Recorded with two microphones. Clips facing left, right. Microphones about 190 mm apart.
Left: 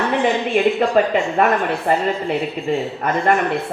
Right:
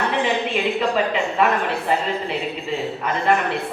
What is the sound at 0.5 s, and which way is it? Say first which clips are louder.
Speech: left 5 dB; 50° left (ahead or behind).